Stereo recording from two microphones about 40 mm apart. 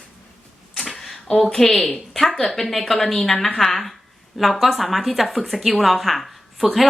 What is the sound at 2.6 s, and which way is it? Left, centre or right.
A woman's voice, centre.